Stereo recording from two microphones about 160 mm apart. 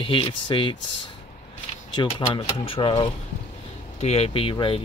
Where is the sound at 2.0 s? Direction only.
35° left (ahead or behind).